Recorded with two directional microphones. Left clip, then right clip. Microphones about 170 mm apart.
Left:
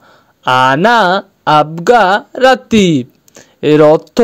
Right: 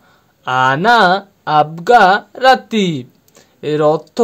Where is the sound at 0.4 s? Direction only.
50° left (ahead or behind).